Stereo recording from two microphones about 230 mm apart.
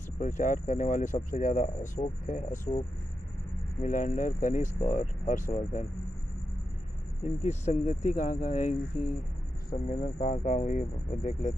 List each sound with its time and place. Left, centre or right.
0.2 s speech: left
3.8 s speech: left
7.2 s speech: left